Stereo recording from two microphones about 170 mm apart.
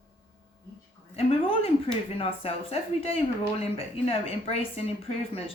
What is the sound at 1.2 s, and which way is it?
Speech, 35° left (ahead or behind).